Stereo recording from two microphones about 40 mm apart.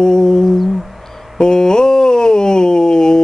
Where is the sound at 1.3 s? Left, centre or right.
Centre.